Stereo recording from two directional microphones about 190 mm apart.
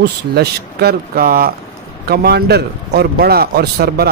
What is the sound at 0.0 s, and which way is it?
A man's voice, 60° right (ahead or behind).